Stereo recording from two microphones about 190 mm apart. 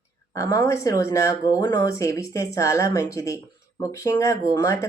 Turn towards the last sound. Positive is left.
turn(degrees=15)  # may be behind; listen again after turning